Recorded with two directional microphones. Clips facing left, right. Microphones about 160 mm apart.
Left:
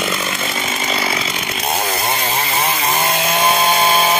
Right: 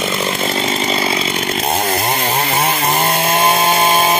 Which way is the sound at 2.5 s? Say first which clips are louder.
Right 2 dB; 60° right (ahead or behind).